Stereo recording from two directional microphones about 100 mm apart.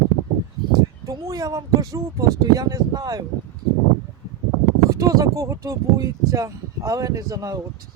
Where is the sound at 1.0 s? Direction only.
40° right (ahead or behind).